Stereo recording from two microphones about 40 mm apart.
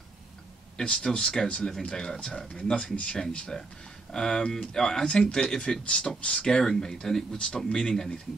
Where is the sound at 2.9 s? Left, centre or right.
Left.